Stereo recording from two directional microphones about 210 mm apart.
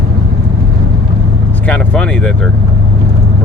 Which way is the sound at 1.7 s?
5° left (ahead or behind).